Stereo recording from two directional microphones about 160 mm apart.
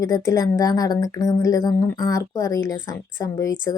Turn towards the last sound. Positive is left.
turn(degrees=20)  # may be behind; listen again after turning